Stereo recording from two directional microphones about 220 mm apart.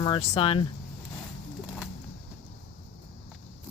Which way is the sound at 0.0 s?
25° left (ahead or behind).